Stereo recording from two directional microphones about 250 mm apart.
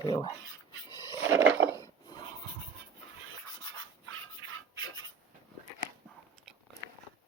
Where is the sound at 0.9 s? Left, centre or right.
Centre.